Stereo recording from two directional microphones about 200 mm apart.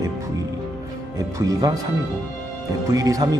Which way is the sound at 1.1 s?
15° right (ahead or behind).